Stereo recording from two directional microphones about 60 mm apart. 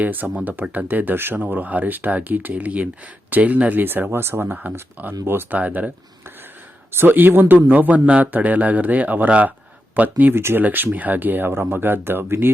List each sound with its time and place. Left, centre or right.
0.0 s speech: right
5.5 s speech: right
6.9 s speech: right
10.3 s speech: right